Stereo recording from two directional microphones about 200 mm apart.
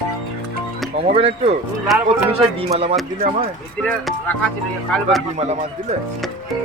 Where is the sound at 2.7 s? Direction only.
30° right (ahead or behind).